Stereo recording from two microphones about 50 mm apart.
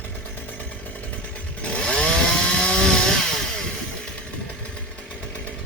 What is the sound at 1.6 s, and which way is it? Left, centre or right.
Chainsaw, left.